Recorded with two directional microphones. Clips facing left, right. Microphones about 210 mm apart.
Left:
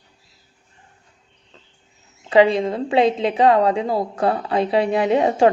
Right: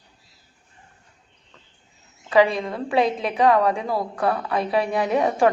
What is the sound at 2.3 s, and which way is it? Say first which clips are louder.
A woman's voice: left 4 dB; 25° left (ahead or behind).